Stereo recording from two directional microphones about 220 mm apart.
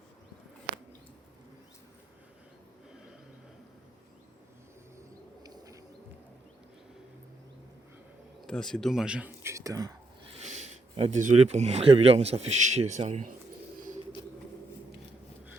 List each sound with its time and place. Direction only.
8.4 s speech: centre (ahead or behind); by 9.9 s 15° right (ahead or behind)
10.3 s speech: 30° right (ahead or behind)